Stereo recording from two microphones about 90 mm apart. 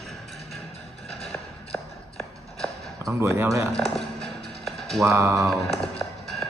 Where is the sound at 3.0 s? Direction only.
30° right (ahead or behind).